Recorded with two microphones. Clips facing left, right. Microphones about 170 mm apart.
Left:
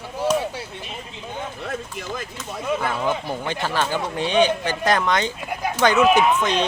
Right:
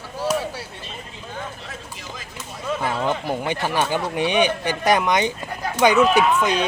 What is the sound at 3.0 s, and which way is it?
Speech, 15° right (ahead or behind).